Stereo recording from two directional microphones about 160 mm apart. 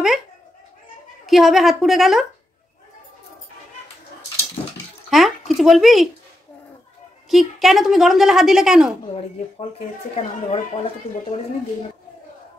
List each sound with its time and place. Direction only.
1.2 s a woman's voice: centre (ahead or behind)
5.1 s speech: centre (ahead or behind)
7.2 s a woman's voice: centre (ahead or behind)
9.1 s speech: 40° left (ahead or behind)